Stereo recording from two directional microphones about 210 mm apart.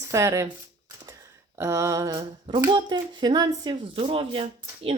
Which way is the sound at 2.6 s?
20° right (ahead or behind).